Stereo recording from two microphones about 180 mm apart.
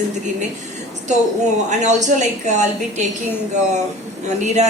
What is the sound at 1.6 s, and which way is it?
A woman's voice, 40° right (ahead or behind).